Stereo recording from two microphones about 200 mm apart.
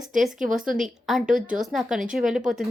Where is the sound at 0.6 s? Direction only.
40° right (ahead or behind).